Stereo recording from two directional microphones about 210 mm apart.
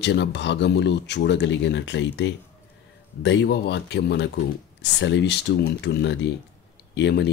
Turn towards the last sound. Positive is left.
turn(degrees=55)  # may be behind; listen again after turning